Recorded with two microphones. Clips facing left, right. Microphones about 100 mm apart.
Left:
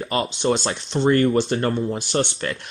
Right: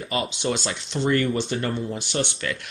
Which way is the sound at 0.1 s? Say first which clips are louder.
Left 4 dB; 45° left (ahead or behind).